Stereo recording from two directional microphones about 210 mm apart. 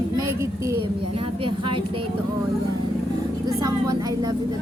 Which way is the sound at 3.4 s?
15° right (ahead or behind).